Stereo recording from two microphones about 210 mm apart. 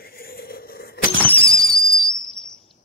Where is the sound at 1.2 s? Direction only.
5° left (ahead or behind).